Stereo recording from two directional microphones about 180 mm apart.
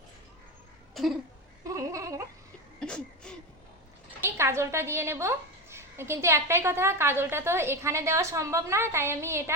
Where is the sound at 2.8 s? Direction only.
5° left (ahead or behind).